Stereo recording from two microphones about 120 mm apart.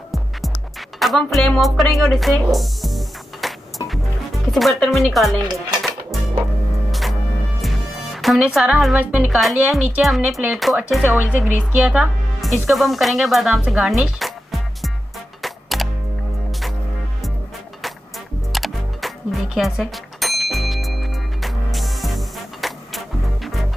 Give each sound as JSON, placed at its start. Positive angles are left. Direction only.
{"t": 0.1, "sound": "music", "side_deg": 0}
{"t": 4.5, "sound": "speech", "side_deg": 0}
{"t": 6.9, "sound": "music", "side_deg": 0}
{"t": 8.4, "sound": "a woman's voice", "side_deg": -5}
{"t": 9.3, "sound": "speech", "side_deg": 0}
{"t": 15.4, "sound": "music", "side_deg": 0}
{"t": 18.5, "sound": "music", "side_deg": 0}